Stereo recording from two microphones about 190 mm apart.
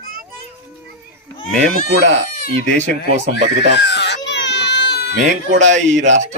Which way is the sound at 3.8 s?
65° left (ahead or behind).